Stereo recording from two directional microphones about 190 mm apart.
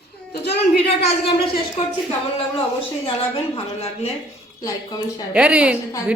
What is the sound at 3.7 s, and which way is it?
Speech, 35° left (ahead or behind).